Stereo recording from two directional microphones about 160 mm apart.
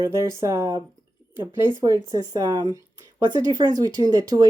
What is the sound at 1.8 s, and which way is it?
Speech, 20° right (ahead or behind).